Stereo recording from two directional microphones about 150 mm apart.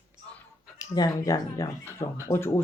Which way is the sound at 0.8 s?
25° left (ahead or behind).